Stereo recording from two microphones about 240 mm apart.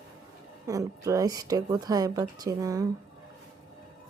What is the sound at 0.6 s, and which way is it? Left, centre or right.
Speech, centre.